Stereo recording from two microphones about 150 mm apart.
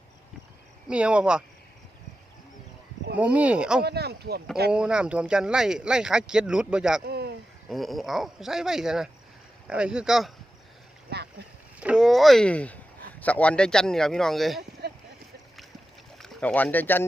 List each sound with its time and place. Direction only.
0.9 s speech: 5° right (ahead or behind)
3.2 s speech: 10° right (ahead or behind)
3.8 s speech: 90° right
4.7 s speech: 5° right (ahead or behind)
7.0 s a sound: 90° right
7.7 s speech: centre (ahead or behind)
11.1 s boat: 90° right
11.8 s speech: 5° right (ahead or behind)
14.8 s boat: 90° right
16.1 s speech: centre (ahead or behind)